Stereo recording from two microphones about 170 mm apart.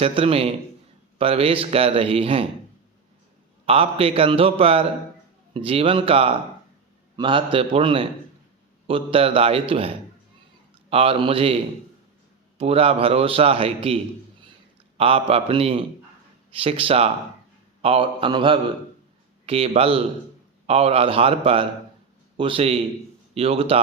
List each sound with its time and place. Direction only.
0.0 s a man's voice: 35° right (ahead or behind)
3.7 s a man's voice: 35° right (ahead or behind)
17.8 s mantra: 35° right (ahead or behind)
19.5 s a man's voice: 35° right (ahead or behind)